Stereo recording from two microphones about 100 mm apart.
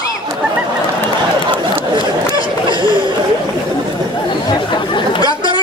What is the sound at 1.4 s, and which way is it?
Chatter, 55° right (ahead or behind).